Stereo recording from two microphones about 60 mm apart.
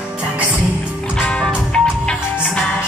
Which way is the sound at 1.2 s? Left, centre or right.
Centre.